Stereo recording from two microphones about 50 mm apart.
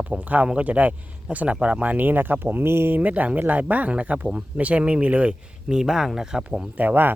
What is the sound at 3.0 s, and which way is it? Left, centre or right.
Speech, right.